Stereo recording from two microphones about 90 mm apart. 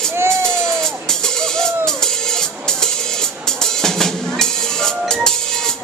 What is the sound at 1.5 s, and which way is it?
Music, 5° left (ahead or behind).